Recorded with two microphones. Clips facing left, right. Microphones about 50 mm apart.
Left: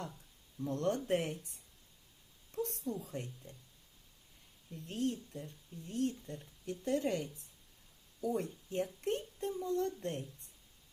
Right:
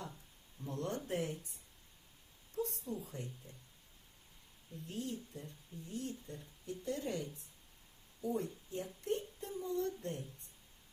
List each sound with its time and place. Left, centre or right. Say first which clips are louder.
0.7 s speech: left 6 dB; left
2.6 s a woman's voice: left 2 dB; left
3.1 s speech: left 3 dB; left
4.7 s speech: left 6 dB; left
8.4 s speech: left 4 dB; left